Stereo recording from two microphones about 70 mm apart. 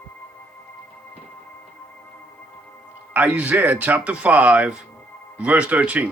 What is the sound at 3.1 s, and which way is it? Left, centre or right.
Speech, right.